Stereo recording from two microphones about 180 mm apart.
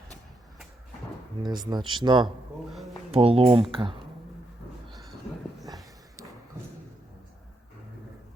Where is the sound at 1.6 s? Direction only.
25° right (ahead or behind).